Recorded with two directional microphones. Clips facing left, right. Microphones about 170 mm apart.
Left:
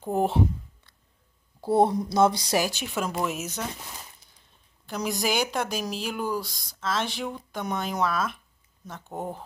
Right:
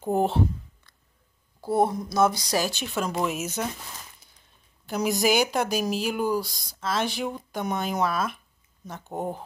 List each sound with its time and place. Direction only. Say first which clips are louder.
1.6 s speech: left 2 dB; 30° left (ahead or behind)
2.5 s speech: even; 10° left (ahead or behind)
4.8 s speech: right 4 dB; 5° right (ahead or behind)